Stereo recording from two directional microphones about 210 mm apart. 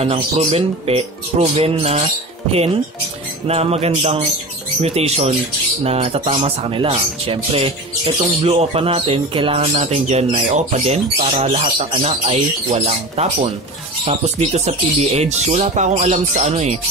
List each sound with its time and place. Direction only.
0.0 s speech: 30° right (ahead or behind)
3.4 s speech: 30° right (ahead or behind)